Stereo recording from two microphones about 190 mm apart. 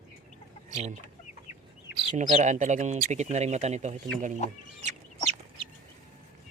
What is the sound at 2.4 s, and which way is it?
Speech, 40° right (ahead or behind).